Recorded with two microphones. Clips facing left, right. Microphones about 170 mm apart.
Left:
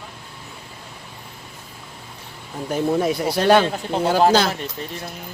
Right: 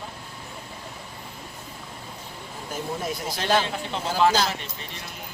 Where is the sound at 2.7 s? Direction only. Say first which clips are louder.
Left 10 dB; 65° left (ahead or behind).